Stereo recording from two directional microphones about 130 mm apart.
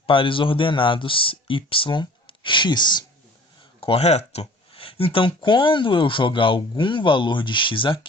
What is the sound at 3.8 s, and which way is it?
Speech, 50° left (ahead or behind).